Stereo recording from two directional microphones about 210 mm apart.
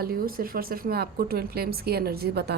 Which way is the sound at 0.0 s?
45° right (ahead or behind).